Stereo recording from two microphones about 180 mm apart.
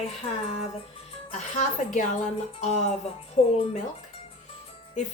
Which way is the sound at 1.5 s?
45° left (ahead or behind).